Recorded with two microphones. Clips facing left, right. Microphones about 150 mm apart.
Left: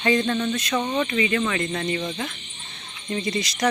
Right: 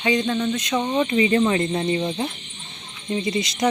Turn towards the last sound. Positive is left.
turn(degrees=-20)  # may be behind; listen again after turning